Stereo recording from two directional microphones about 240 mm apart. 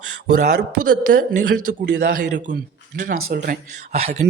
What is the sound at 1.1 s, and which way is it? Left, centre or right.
Speech, right.